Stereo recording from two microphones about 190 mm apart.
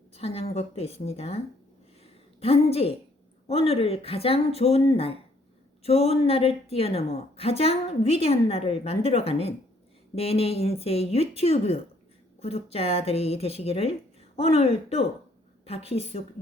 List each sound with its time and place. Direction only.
0.1 s a sound: 30° left (ahead or behind)
0.5 s a woman's voice: 30° left (ahead or behind)
2.4 s a woman's voice: 30° left (ahead or behind)